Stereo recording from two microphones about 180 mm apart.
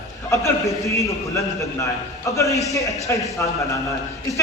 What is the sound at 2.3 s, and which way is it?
Speech, 15° left (ahead or behind).